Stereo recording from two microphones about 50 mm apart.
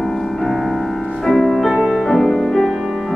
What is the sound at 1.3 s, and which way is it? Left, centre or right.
Music, centre.